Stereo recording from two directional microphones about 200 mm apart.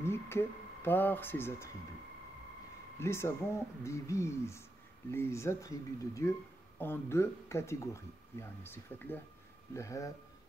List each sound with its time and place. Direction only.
0.0 s speech: 10° left (ahead or behind)
3.0 s speech: 15° left (ahead or behind)